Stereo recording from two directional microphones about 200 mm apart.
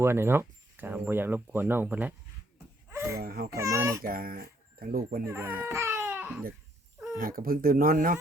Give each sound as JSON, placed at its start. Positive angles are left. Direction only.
{"t": 0.0, "sound": "speech", "side_deg": -10}
{"t": 2.9, "sound": "a sound", "side_deg": -15}
{"t": 3.2, "sound": "speech", "side_deg": -50}
{"t": 3.5, "sound": "speech", "side_deg": -15}
{"t": 4.0, "sound": "speech", "side_deg": -45}
{"t": 5.2, "sound": "speech", "side_deg": -15}
{"t": 5.6, "sound": "baby cry", "side_deg": -15}
{"t": 7.2, "sound": "speech", "side_deg": -45}